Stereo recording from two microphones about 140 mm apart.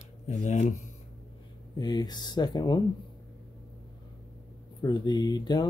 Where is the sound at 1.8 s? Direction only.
30° left (ahead or behind).